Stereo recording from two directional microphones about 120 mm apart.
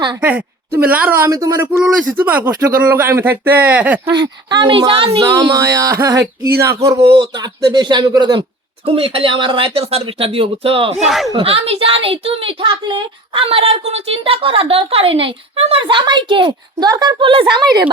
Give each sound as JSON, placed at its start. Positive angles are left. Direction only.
{"t": 0.2, "sound": "speech", "side_deg": -15}
{"t": 1.3, "sound": "speech", "side_deg": -30}
{"t": 1.8, "sound": "speech", "side_deg": -15}
{"t": 4.1, "sound": "a woman's voice", "side_deg": -40}
{"t": 5.4, "sound": "speech", "side_deg": -30}
{"t": 7.1, "sound": "speech", "side_deg": -35}
{"t": 8.9, "sound": "a woman's voice", "side_deg": -50}